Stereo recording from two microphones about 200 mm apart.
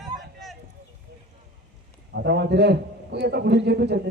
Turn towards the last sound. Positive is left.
turn(degrees=-55)  # may be behind; listen again after turning